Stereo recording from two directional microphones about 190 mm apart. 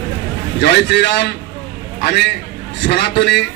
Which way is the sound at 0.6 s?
60° left (ahead or behind).